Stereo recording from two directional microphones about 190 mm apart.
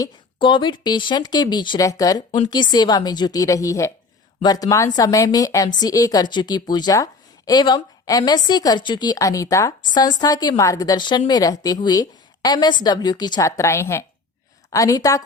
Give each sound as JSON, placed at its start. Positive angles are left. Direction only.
{"t": 0.0, "sound": "a woman's voice", "side_deg": 25}